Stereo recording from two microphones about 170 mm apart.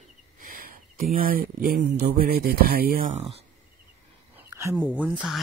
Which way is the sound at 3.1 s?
35° right (ahead or behind).